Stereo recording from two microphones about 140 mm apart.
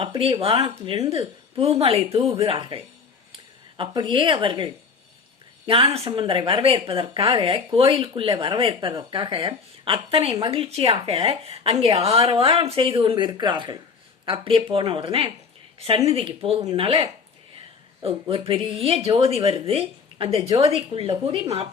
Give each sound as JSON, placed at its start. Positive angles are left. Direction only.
{"t": 0.0, "sound": "a woman's voice", "side_deg": -40}